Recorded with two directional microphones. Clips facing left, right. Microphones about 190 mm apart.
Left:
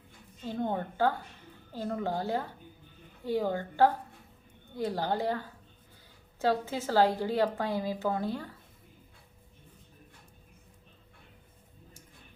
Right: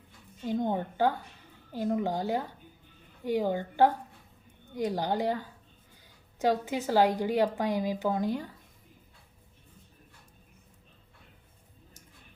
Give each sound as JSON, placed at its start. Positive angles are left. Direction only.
{"t": 0.4, "sound": "a woman's voice", "side_deg": -15}